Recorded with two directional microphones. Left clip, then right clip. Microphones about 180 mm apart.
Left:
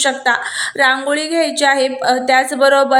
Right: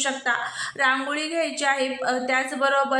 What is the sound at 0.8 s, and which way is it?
A woman's voice, 35° left (ahead or behind).